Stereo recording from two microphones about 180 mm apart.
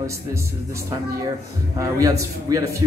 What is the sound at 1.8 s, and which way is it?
Speech, 20° right (ahead or behind).